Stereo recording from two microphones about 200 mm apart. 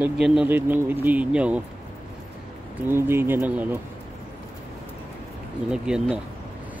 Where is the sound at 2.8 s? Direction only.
10° right (ahead or behind).